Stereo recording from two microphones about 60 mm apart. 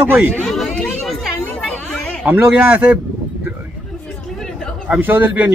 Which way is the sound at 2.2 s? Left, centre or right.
Right.